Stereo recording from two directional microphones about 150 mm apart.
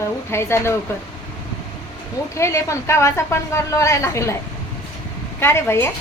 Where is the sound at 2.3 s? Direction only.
20° left (ahead or behind).